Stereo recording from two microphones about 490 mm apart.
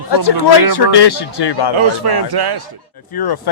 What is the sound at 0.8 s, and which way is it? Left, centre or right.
Speech, left.